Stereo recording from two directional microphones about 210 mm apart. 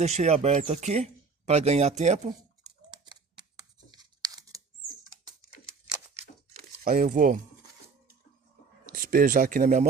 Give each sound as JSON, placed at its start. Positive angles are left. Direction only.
{"t": 0.0, "sound": "speech", "side_deg": -30}
{"t": 3.0, "sound": "scissors", "side_deg": -20}
{"t": 3.9, "sound": "tearing", "side_deg": -20}
{"t": 6.8, "sound": "speech", "side_deg": -40}
{"t": 8.9, "sound": "speech", "side_deg": -45}